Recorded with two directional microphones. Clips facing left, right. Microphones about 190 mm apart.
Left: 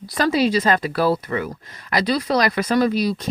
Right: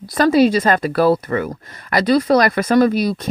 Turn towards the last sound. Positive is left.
turn(degrees=-50)  # may be behind; listen again after turning